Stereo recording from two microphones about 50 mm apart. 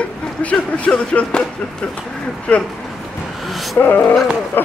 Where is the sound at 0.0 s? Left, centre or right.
Left.